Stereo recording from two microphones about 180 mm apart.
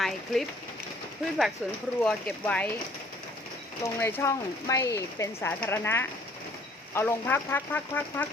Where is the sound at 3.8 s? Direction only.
15° left (ahead or behind).